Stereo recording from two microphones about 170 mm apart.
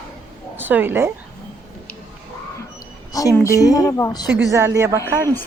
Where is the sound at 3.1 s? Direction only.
20° left (ahead or behind).